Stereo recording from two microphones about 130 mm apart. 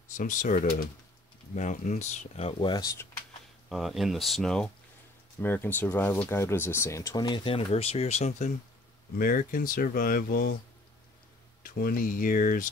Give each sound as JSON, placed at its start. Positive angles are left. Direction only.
{"t": 0.2, "sound": "speech", "side_deg": 80}
{"t": 2.6, "sound": "speech", "side_deg": 30}
{"t": 3.6, "sound": "speech", "side_deg": 0}
{"t": 5.4, "sound": "speech", "side_deg": 15}
{"t": 7.2, "sound": "speech", "side_deg": 40}
{"t": 9.2, "sound": "speech", "side_deg": 90}
{"t": 11.6, "sound": "speech", "side_deg": 90}